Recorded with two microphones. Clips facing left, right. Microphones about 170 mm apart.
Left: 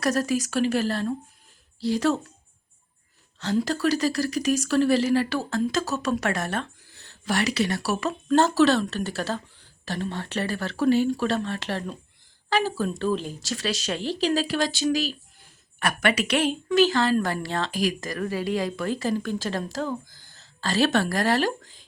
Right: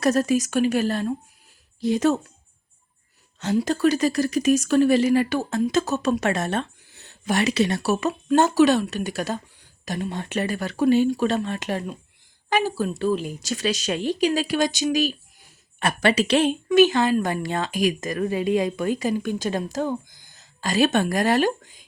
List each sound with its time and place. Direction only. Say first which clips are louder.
0.0 s speech: right 4 dB; 25° right (ahead or behind)
3.4 s speech: right 3 dB; 20° right (ahead or behind)
15.8 s speech: right 3 dB; 25° right (ahead or behind)